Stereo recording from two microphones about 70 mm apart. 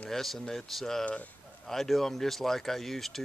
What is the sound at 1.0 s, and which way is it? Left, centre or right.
Speech, centre.